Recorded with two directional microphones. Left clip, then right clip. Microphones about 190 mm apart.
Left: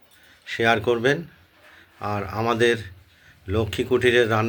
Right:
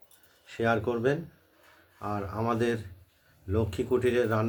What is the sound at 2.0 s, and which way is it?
Speech, 15° left (ahead or behind).